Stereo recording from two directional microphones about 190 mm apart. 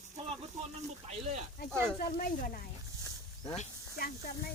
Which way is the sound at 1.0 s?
35° right (ahead or behind).